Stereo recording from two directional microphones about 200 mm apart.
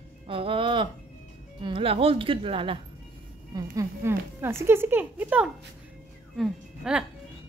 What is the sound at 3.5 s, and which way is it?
Speech, 15° right (ahead or behind).